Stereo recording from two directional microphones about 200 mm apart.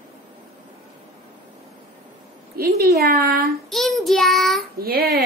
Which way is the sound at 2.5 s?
50° right (ahead or behind).